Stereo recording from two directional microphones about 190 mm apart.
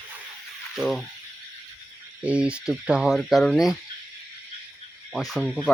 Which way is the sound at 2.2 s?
5° right (ahead or behind).